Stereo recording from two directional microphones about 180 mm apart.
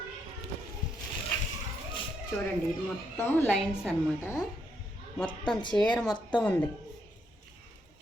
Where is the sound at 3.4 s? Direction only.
Centre (ahead or behind).